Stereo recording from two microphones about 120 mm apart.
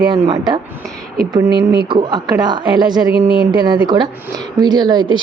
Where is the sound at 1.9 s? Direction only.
35° right (ahead or behind).